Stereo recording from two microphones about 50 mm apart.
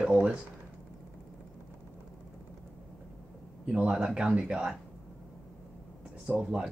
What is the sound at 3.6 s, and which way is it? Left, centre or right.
Speech, right.